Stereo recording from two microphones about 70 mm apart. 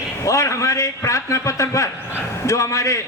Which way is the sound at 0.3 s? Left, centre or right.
Left.